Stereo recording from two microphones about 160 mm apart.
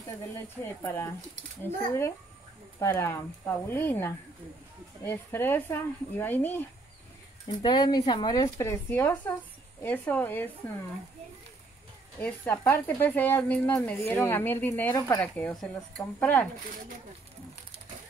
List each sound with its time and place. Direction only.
0.8 s speech: 15° left (ahead or behind)
7.6 s speech: 25° left (ahead or behind); by 10.5 s 10° left (ahead or behind)
12.2 s speech: 10° left (ahead or behind)
15.2 s speech: 5° left (ahead or behind)